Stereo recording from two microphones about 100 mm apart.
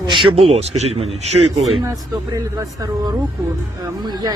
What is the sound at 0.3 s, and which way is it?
Speech, 85° right.